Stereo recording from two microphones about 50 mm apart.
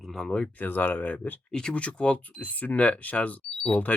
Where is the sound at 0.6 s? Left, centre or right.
Left.